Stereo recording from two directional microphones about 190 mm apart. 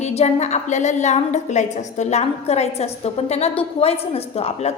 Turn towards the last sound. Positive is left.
turn(degrees=35)  # may be behind; listen again after turning